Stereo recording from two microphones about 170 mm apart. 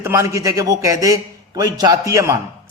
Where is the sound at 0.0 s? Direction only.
15° right (ahead or behind).